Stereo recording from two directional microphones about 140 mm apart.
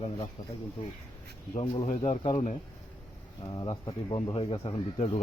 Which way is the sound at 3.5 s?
30° left (ahead or behind).